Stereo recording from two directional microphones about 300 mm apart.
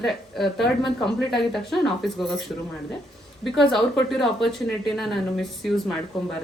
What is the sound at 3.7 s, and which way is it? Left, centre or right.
Speech, centre.